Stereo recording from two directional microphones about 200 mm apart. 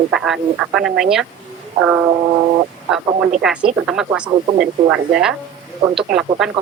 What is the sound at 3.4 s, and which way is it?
Speech, 5° right (ahead or behind).